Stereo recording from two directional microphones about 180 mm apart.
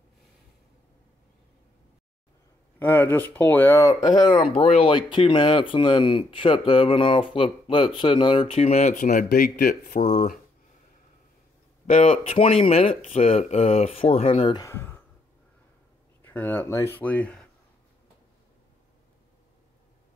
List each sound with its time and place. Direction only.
2.8 s speech: 10° left (ahead or behind); by 10.3 s 45° left (ahead or behind)
11.8 s speech: 35° left (ahead or behind)
14.6 s a sound: 15° left (ahead or behind)
16.2 s speech: 10° left (ahead or behind)